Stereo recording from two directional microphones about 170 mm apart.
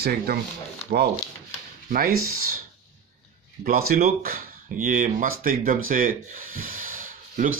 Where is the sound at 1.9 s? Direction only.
60° right (ahead or behind).